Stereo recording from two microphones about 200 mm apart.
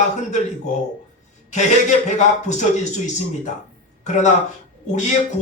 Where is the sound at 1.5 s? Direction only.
35° left (ahead or behind).